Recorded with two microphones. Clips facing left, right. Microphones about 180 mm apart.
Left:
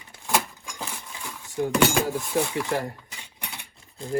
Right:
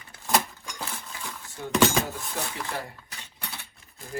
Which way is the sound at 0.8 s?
15° left (ahead or behind).